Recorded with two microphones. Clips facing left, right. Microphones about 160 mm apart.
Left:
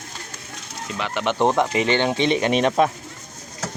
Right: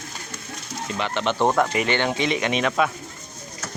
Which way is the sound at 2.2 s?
35° left (ahead or behind).